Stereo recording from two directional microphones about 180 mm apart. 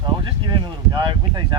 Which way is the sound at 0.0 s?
25° right (ahead or behind).